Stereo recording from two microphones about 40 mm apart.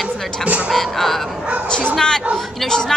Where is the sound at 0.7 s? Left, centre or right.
Centre.